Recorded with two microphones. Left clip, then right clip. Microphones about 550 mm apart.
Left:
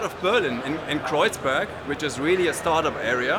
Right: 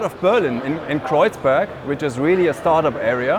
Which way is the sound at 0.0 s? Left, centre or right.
Right.